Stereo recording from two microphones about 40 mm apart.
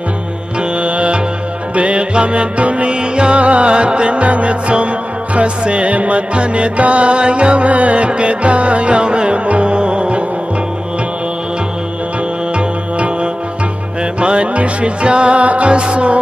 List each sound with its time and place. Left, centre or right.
0.6 s music: right
12.5 s music: right